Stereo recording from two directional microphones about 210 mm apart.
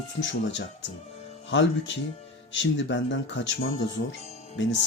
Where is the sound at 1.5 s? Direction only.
60° left (ahead or behind).